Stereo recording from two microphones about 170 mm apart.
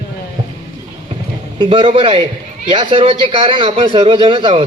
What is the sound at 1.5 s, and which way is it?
A man's voice, 30° right (ahead or behind).